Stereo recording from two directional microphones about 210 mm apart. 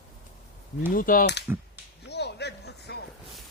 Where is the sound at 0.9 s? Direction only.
40° left (ahead or behind).